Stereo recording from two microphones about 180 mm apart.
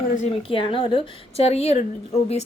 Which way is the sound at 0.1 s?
45° left (ahead or behind).